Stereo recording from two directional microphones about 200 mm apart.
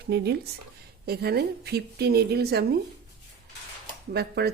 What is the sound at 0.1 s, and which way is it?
Speech, 55° right (ahead or behind).